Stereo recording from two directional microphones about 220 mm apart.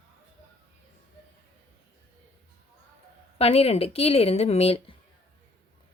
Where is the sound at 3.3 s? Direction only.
25° left (ahead or behind).